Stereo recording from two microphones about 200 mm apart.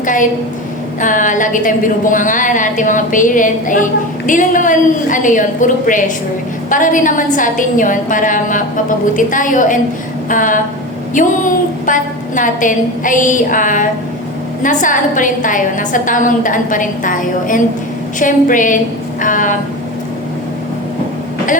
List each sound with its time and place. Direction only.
0.0 s a woman's voice: 40° left (ahead or behind)